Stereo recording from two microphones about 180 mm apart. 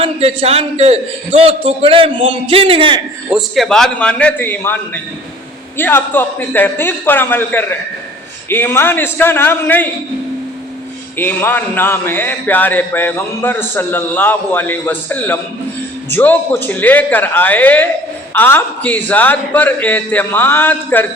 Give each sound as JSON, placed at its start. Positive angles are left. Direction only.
{"t": 0.0, "sound": "a man's voice", "side_deg": -30}
{"t": 3.2, "sound": "a man's voice", "side_deg": 0}
{"t": 11.2, "sound": "a man's voice", "side_deg": 10}